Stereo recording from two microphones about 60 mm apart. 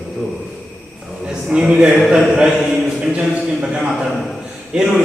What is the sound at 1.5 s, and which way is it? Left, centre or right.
Speech, centre.